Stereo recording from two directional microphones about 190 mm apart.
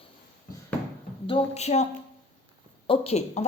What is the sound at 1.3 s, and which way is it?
A woman's voice, 35° left (ahead or behind).